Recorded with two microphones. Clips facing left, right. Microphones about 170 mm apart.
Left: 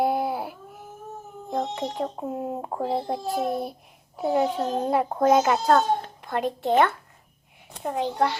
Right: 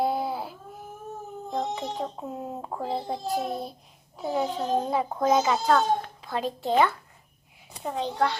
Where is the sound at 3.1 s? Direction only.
60° left (ahead or behind).